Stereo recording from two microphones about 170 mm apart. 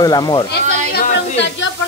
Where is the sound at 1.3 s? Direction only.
90° left.